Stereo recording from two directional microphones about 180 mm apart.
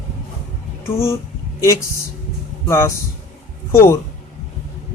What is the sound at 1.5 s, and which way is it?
Speech, 15° left (ahead or behind).